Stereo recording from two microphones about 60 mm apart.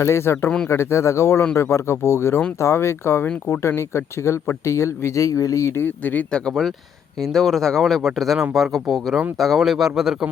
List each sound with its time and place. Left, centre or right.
0.0 s speech: left
5.7 s speech: left
6.5 s speech: centre